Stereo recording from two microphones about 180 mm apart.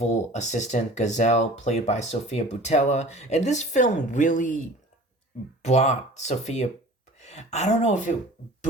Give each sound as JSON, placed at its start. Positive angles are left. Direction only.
{"t": 0.0, "sound": "speech", "side_deg": 40}
{"t": 5.6, "sound": "speech", "side_deg": 40}